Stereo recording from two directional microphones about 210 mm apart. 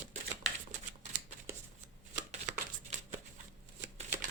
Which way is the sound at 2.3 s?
35° right (ahead or behind).